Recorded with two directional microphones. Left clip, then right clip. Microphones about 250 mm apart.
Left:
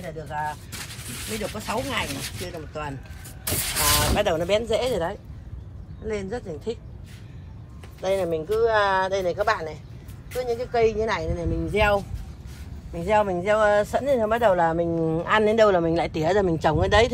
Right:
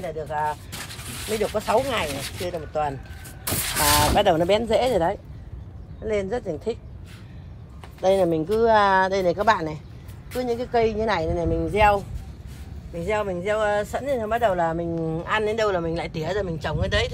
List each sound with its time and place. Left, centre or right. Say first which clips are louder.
0.0 s speech: right 4 dB; right
1.5 s speech: right 7 dB; right
3.4 s speech: right 1 dB; centre
3.9 s speech: right 5 dB; right
8.0 s speech: right 4 dB; right
11.6 s speech: right 2 dB; centre
12.9 s speech: left 4 dB; centre
14.9 s speech: left 3 dB; left